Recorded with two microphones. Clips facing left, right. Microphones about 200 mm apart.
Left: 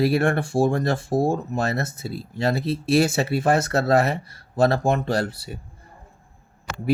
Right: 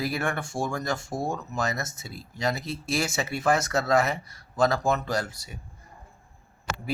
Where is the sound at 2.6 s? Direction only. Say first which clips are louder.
Left 9 dB; 60° left (ahead or behind).